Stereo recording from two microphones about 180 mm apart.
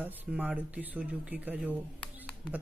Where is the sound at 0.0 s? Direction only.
10° right (ahead or behind).